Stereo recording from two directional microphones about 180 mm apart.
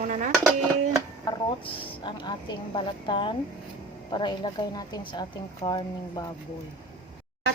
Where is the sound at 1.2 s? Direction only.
25° left (ahead or behind).